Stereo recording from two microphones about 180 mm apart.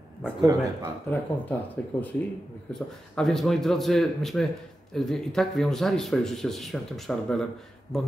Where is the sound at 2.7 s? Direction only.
5° left (ahead or behind).